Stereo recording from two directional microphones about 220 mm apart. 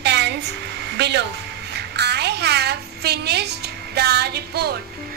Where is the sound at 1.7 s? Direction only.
50° right (ahead or behind).